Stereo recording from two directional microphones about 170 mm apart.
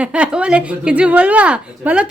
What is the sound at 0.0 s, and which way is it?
Chuckle, 5° right (ahead or behind).